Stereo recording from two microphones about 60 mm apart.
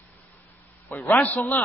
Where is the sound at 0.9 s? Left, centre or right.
Left.